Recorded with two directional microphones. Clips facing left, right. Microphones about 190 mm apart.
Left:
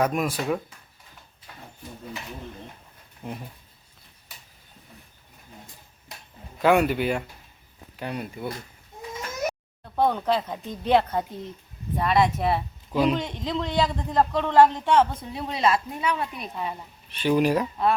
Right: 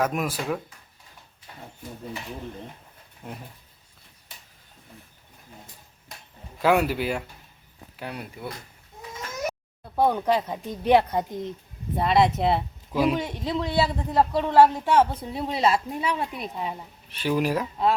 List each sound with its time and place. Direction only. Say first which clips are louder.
0.0 s speech: left 2 dB; centre (ahead or behind)
3.2 s speech: left 4 dB; centre (ahead or behind)
6.6 s speech: left 2 dB; 5° right (ahead or behind)
9.8 s a man's voice: right 1 dB; 10° right (ahead or behind)
12.9 s a man's voice: even; 5° right (ahead or behind)
15.3 s a woman's voice: right 1 dB; 30° right (ahead or behind)
16.3 s speech: right 1 dB; 10° right (ahead or behind)